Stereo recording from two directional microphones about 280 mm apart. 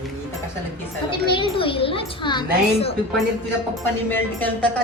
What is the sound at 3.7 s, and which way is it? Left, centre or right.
Speech, centre.